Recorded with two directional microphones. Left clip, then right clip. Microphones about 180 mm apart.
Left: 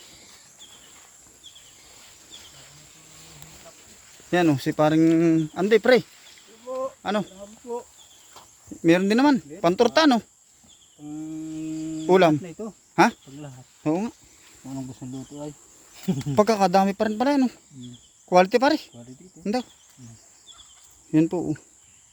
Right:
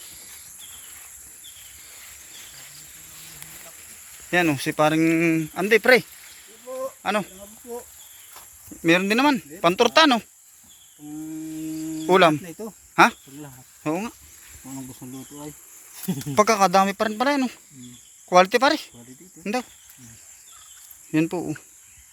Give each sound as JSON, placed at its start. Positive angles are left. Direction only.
{"t": 4.3, "sound": "speech", "side_deg": 25}
{"t": 6.8, "sound": "a sound", "side_deg": 15}
{"t": 8.8, "sound": "speech", "side_deg": 25}
{"t": 12.0, "sound": "speech", "side_deg": 15}
{"t": 16.0, "sound": "speech", "side_deg": 25}
{"t": 21.1, "sound": "speech", "side_deg": 25}